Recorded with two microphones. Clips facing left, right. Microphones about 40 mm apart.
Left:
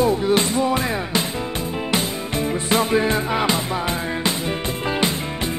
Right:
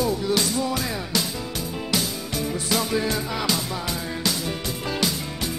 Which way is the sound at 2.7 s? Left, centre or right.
Left.